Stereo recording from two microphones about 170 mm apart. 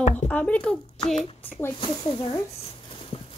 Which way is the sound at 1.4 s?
10° left (ahead or behind).